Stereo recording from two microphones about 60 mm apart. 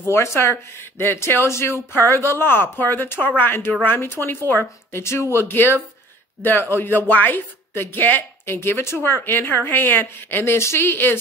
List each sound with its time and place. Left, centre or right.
0.0 s speech: left